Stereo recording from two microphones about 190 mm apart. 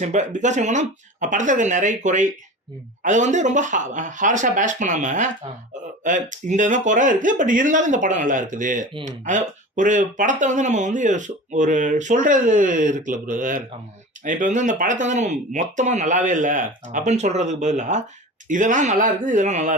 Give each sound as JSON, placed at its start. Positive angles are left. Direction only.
{"t": 0.0, "sound": "speech", "side_deg": -40}